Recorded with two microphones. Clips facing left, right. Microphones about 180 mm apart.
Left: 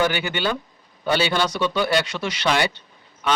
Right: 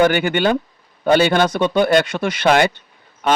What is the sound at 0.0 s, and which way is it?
A man's voice, 50° right (ahead or behind).